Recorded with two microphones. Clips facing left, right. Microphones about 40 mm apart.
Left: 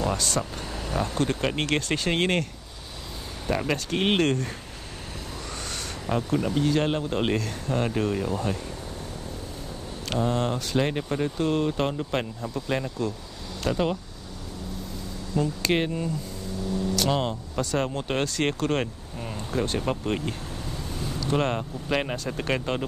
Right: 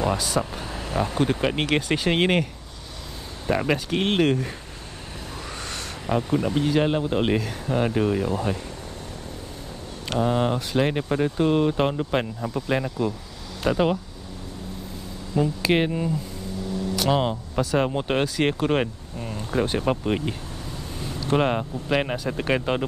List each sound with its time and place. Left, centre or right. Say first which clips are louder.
0.0 s speech: right 3 dB; centre
3.4 s speech: right 4 dB; centre
6.0 s speech: right 3 dB; centre
10.0 s speech: right 3 dB; centre
15.3 s speech: right 3 dB; centre
19.1 s a sound: right 2 dB; centre
19.5 s speech: right 4 dB; centre